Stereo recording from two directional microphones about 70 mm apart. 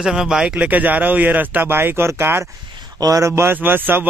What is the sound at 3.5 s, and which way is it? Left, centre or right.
Speech, right.